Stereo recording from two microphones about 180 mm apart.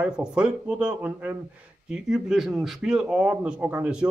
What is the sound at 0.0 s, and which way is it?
Speech, 5° right (ahead or behind).